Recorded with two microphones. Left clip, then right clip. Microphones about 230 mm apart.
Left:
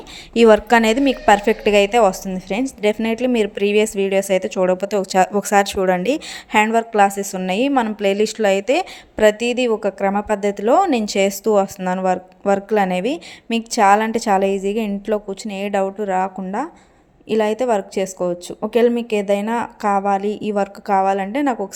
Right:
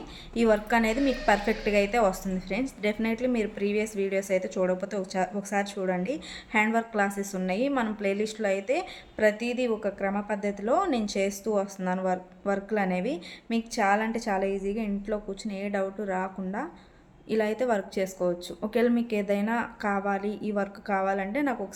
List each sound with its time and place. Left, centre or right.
0.3 s a woman's voice: left